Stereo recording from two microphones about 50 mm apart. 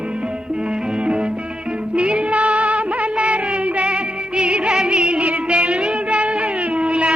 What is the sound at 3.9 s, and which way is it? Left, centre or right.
Music, centre.